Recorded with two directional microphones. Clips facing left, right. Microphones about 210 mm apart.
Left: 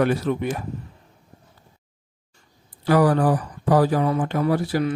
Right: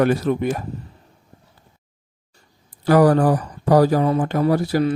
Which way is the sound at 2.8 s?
45° right (ahead or behind).